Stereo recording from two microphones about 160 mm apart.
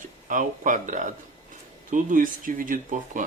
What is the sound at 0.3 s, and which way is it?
Speech, 55° right (ahead or behind).